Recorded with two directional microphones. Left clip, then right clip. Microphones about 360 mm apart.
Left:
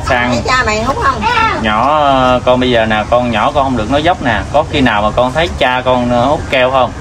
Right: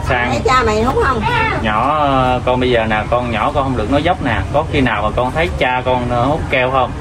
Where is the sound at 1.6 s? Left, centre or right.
Left.